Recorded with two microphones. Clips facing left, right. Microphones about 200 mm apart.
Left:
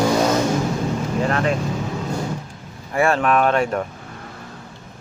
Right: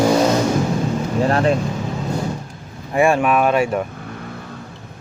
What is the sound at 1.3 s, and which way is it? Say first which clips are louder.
Vehicle: right 5 dB; 35° right (ahead or behind).